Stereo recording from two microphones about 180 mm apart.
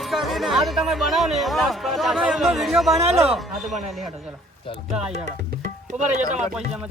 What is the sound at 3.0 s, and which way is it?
Speech, 35° right (ahead or behind).